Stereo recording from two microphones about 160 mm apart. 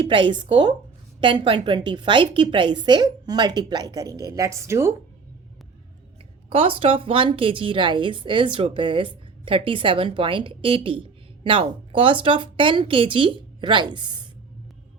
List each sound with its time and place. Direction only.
0.0 s a woman's voice: 30° right (ahead or behind); by 4.9 s 15° right (ahead or behind)
6.5 s a woman's voice: 35° right (ahead or behind)